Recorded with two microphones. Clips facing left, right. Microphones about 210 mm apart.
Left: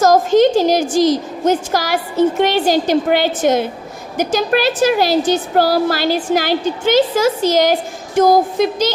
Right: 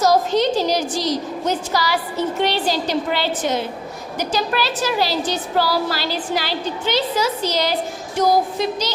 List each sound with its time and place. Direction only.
0.0 s a woman's voice: 50° left (ahead or behind)